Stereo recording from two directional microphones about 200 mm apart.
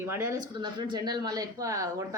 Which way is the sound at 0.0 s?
15° right (ahead or behind).